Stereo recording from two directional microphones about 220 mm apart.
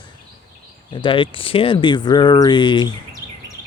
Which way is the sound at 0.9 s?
20° left (ahead or behind).